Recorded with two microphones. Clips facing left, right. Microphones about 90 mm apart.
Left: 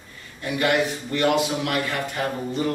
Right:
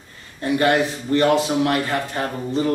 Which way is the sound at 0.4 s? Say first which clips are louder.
Right 4 dB; 35° right (ahead or behind).